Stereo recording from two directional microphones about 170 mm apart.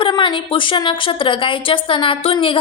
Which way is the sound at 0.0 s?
30° left (ahead or behind).